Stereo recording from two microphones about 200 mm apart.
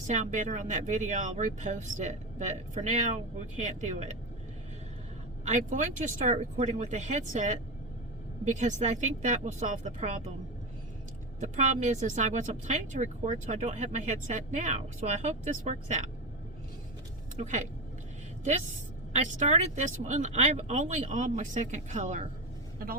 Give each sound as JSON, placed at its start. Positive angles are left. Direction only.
{"t": 0.1, "sound": "speech", "side_deg": -40}
{"t": 5.5, "sound": "speech", "side_deg": -40}
{"t": 11.3, "sound": "speech", "side_deg": -35}
{"t": 17.3, "sound": "speech", "side_deg": -35}
{"t": 19.1, "sound": "speech", "side_deg": -35}